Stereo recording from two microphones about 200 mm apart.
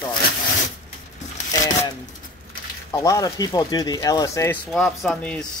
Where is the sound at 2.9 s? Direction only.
15° left (ahead or behind).